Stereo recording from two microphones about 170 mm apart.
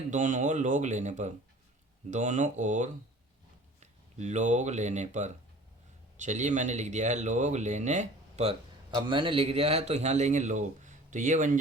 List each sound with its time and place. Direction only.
0.1 s speech: 45° right (ahead or behind)
8.9 s a man's voice: 30° right (ahead or behind); by 11.6 s 50° right (ahead or behind)